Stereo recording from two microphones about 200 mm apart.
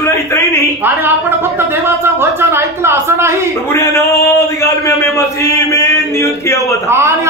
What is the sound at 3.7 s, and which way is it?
A man's voice, 15° left (ahead or behind).